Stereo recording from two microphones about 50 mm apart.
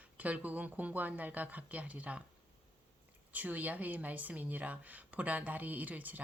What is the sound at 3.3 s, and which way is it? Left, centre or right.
Speech, right.